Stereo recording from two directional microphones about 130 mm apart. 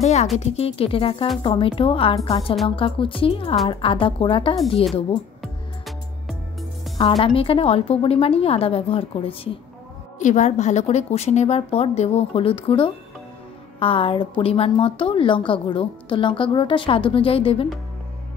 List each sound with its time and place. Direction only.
0.0 s music: 55° left (ahead or behind)
0.4 s a woman's voice: 50° left (ahead or behind)
5.4 s music: centre (ahead or behind)
7.0 s a woman's voice: 45° left (ahead or behind)
10.1 s a woman's voice: 70° left (ahead or behind); by 17.6 s 45° left (ahead or behind)